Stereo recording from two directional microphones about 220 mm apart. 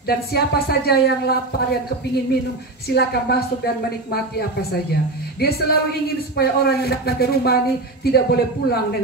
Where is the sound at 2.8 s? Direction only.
45° left (ahead or behind).